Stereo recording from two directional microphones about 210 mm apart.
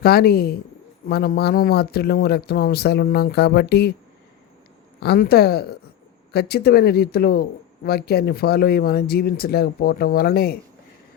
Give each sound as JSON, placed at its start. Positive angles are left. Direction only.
{"t": 0.0, "sound": "speech", "side_deg": 45}
{"t": 4.9, "sound": "speech", "side_deg": 50}